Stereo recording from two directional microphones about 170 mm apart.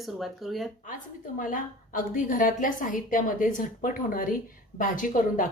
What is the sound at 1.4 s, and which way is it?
A woman's voice, 50° left (ahead or behind).